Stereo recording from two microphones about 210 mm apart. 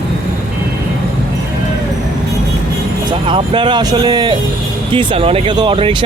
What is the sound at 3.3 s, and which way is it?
Speech, 25° right (ahead or behind).